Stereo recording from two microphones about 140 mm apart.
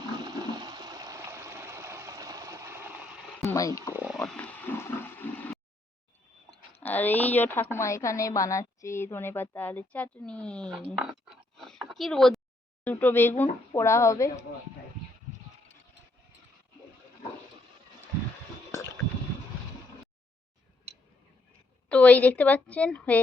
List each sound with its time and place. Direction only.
0.2 s toilet flush: 30° right (ahead or behind)
3.4 s speech: 25° left (ahead or behind)
3.9 s a sound: 10° right (ahead or behind)
4.4 s water: 15° left (ahead or behind)
6.7 s a woman's voice: 10° left (ahead or behind)
10.8 s a sound: 5° right (ahead or behind)
12.8 s a woman's voice: 10° left (ahead or behind)
21.8 s a woman's voice: 10° left (ahead or behind)